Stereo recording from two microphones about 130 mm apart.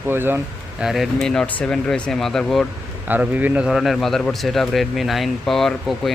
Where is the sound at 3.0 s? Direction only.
15° right (ahead or behind).